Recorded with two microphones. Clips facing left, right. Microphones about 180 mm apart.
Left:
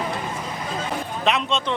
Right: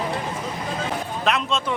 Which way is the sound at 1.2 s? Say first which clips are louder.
Left 1 dB; centre (ahead or behind).